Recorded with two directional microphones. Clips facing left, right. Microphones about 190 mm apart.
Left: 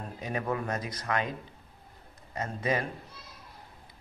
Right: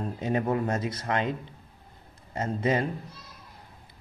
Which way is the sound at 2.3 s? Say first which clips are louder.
Right 4 dB; 25° right (ahead or behind).